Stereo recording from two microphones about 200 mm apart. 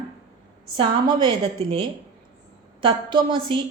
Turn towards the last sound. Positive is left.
turn(degrees=-25)  # may be behind; listen again after turning